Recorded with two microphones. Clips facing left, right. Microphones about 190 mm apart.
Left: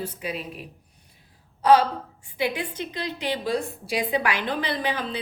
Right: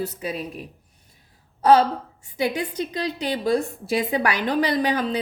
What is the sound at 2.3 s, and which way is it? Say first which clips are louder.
A woman's voice: right 3 dB; 40° right (ahead or behind).